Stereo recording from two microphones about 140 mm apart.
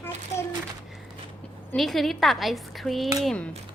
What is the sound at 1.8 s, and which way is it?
A woman's voice, centre (ahead or behind).